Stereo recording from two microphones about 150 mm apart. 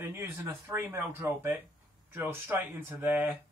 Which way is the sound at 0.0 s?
15° right (ahead or behind).